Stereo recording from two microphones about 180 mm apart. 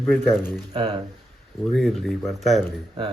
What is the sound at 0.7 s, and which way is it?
Speech, 35° right (ahead or behind).